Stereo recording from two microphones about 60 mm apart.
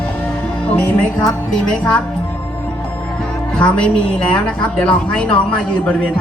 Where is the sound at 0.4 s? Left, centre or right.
Left.